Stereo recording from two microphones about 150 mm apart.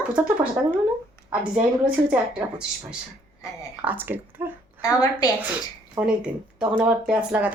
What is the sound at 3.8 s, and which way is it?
Speech, 10° right (ahead or behind).